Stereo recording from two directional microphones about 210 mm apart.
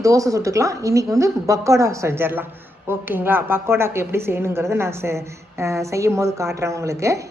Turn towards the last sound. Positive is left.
turn(degrees=-15)  # may be behind; listen again after turning